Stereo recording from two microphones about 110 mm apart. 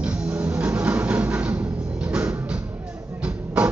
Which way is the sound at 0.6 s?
10° right (ahead or behind).